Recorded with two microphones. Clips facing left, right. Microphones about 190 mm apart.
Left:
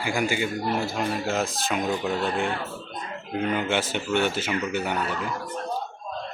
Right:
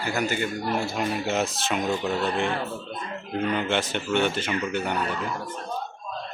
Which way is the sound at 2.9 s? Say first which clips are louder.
Right 1 dB; 20° left (ahead or behind).